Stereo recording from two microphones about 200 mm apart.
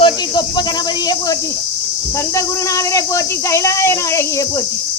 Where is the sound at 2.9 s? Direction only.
15° left (ahead or behind).